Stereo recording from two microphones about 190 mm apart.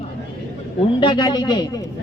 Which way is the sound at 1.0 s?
25° left (ahead or behind).